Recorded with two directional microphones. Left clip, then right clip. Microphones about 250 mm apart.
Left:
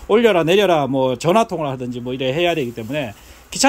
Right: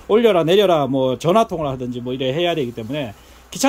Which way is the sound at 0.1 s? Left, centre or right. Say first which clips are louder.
Even; centre.